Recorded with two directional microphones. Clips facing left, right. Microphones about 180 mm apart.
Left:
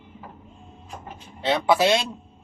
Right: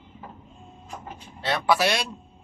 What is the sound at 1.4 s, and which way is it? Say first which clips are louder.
Speech: left 3 dB; 20° left (ahead or behind).